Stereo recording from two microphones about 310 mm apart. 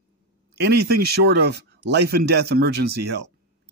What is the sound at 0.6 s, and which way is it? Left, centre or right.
Speech, right.